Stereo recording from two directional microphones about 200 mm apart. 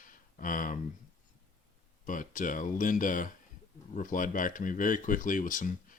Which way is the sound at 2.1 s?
40° left (ahead or behind).